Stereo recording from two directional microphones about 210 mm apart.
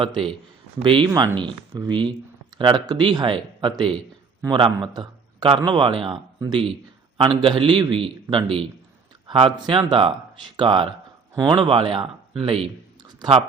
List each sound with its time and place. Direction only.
0.0 s a man's voice: 25° right (ahead or behind)